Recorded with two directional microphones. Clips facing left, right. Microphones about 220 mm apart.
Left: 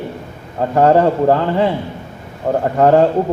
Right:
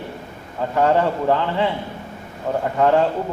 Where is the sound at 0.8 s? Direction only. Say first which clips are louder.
Left 6 dB; 45° left (ahead or behind).